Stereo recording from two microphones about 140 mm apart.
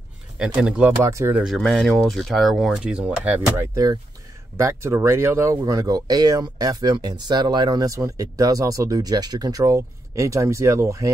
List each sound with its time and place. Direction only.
0.6 s speech: 5° right (ahead or behind)
1.0 s speech: 20° right (ahead or behind)
1.4 s speech: centre (ahead or behind)
3.7 s speech: 25° right (ahead or behind)